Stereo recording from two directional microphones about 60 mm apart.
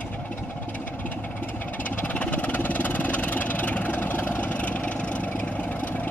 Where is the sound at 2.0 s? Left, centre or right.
Left.